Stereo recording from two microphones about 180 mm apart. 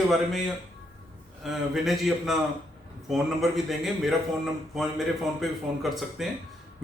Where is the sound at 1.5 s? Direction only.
Centre (ahead or behind).